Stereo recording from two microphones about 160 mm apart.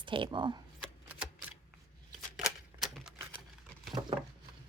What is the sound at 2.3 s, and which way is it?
Typewriter, centre (ahead or behind).